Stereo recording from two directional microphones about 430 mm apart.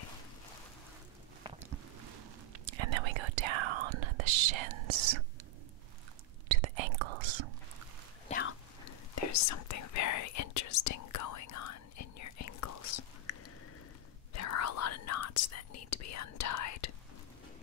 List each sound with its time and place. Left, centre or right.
1.5 s boat: centre
2.5 s whispering: right
6.5 s whispering: right
8.3 s a sound: left
9.1 s whispering: left
13.3 s a sound: left
14.3 s whispering: left